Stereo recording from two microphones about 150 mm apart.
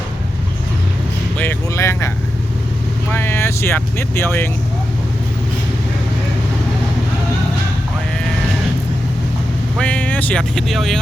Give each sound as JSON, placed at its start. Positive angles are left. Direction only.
{"t": 1.4, "sound": "speech", "side_deg": 15}
{"t": 3.1, "sound": "speech", "side_deg": 15}
{"t": 9.7, "sound": "speech", "side_deg": 10}